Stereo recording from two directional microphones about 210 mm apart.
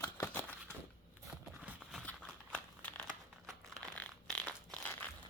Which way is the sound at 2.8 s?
10° left (ahead or behind).